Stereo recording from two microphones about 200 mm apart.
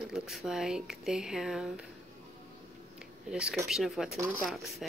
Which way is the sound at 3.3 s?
5° right (ahead or behind).